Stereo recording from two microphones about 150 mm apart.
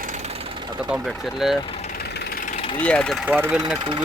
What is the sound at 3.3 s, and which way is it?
Speech, 10° right (ahead or behind).